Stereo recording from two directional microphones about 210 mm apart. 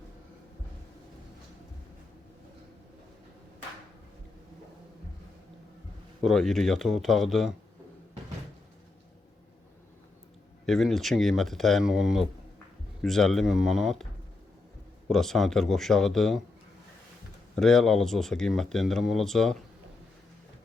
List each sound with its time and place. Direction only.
6.2 s speech: centre (ahead or behind)
10.7 s speech: centre (ahead or behind)
15.1 s speech: centre (ahead or behind)
17.5 s speech: centre (ahead or behind)